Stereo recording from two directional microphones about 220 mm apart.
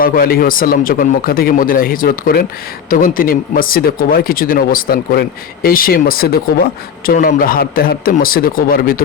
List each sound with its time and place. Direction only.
0.0 s a man's voice: 40° left (ahead or behind)